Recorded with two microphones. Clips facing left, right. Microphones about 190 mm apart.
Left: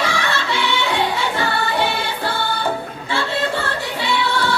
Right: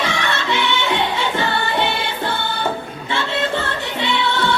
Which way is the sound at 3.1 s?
20° right (ahead or behind).